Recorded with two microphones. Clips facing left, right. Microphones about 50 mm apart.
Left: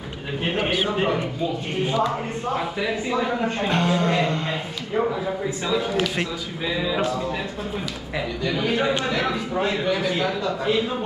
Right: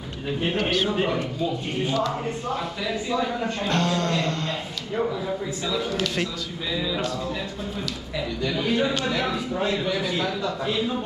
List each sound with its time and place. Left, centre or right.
0.4 s speech: centre
8.5 s speech: left
9.1 s speech: centre
9.6 s speech: left